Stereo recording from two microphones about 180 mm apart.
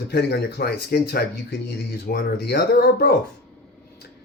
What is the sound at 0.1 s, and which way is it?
Speech, 65° left (ahead or behind).